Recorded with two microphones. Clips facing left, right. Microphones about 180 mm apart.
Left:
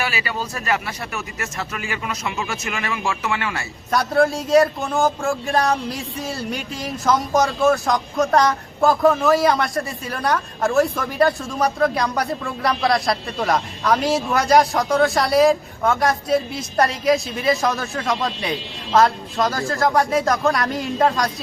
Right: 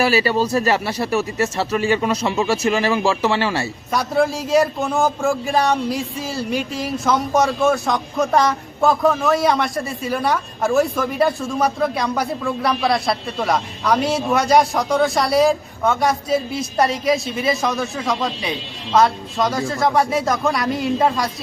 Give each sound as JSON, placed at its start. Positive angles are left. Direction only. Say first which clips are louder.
{"t": 0.0, "sound": "speech", "louder": "right 9 dB", "side_deg": -35}
{"t": 3.9, "sound": "a man's voice", "louder": "left 1 dB", "side_deg": 0}